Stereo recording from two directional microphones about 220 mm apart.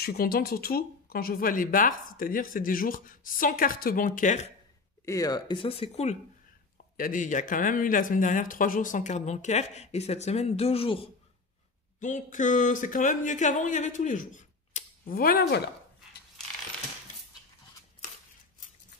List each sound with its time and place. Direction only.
0.0 s speech: 45° left (ahead or behind)
5.0 s speech: 15° left (ahead or behind)
12.0 s speech: 35° left (ahead or behind)